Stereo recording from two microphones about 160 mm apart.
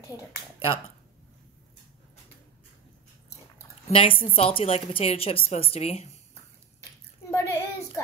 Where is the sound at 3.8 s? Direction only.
35° left (ahead or behind).